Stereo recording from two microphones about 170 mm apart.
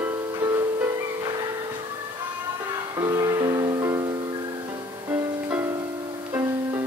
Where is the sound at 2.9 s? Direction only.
20° right (ahead or behind).